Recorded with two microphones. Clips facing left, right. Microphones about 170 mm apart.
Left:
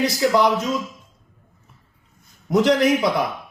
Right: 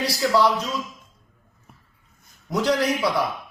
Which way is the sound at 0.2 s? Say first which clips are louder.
Left 1 dB; 20° left (ahead or behind).